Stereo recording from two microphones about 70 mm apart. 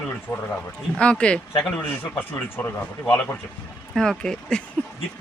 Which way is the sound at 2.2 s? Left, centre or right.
Left.